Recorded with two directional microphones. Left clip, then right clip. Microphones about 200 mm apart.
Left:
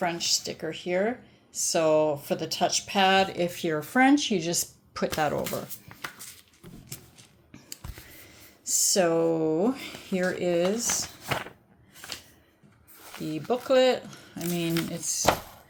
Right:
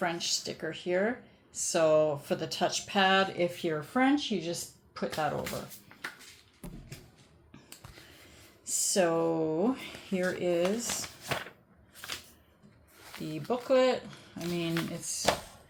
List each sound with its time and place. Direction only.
0.0 s speech: 20° left (ahead or behind); by 5.5 s 45° left (ahead or behind)
8.6 s speech: 25° left (ahead or behind)
13.2 s speech: 25° left (ahead or behind)